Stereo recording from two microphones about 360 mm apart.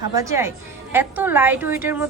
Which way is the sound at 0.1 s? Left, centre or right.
Centre.